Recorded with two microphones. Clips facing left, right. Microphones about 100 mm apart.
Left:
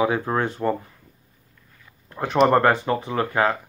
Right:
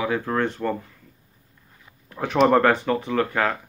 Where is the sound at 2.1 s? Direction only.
5° left (ahead or behind).